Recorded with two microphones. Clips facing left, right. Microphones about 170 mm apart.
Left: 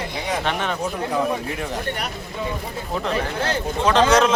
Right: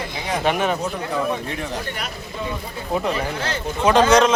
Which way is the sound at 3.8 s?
10° right (ahead or behind).